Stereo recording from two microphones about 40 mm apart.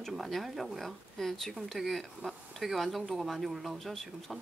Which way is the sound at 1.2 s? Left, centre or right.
Centre.